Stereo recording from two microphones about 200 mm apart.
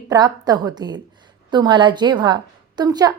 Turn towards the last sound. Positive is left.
turn(degrees=-20)  # may be behind; listen again after turning